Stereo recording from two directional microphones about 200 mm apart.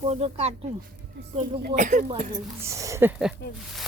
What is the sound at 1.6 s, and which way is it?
Snake, 40° right (ahead or behind).